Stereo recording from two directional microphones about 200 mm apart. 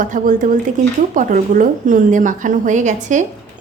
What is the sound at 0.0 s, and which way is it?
A woman's voice, 40° right (ahead or behind).